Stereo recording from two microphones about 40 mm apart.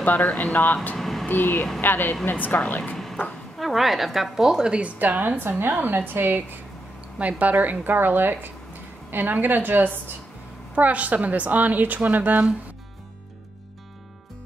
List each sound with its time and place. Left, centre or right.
0.0 s speech: left
0.9 s a sound: centre
1.3 s speech: left
2.3 s speech: left
3.5 s a woman's voice: centre
4.9 s a woman's voice: right
5.6 s a woman's voice: right
7.2 s a woman's voice: right
10.7 s a woman's voice: right